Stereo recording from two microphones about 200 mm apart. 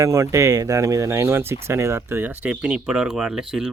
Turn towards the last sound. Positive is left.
turn(degrees=-5)  # may be behind; listen again after turning